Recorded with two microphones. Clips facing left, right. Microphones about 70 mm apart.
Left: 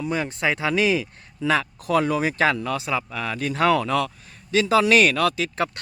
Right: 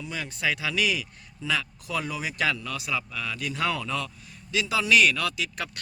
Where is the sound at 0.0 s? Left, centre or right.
Left.